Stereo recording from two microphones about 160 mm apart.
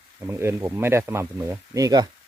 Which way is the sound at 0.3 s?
15° right (ahead or behind).